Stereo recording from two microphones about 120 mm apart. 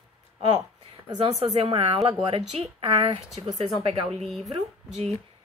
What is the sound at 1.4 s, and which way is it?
Speech, 50° right (ahead or behind).